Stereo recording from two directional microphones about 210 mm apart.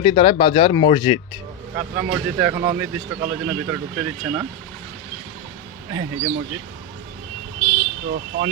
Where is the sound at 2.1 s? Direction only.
10° right (ahead or behind).